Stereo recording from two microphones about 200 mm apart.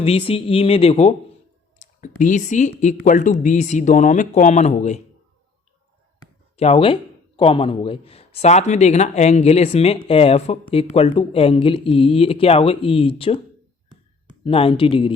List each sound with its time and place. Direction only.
0.0 s speech: 30° left (ahead or behind)
6.6 s speech: 30° left (ahead or behind)
14.4 s speech: 25° left (ahead or behind)